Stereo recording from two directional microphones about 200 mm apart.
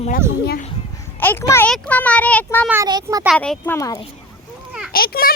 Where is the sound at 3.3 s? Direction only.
5° left (ahead or behind).